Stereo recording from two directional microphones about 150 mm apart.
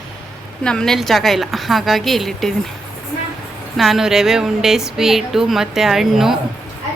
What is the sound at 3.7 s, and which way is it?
A woman's voice, centre (ahead or behind).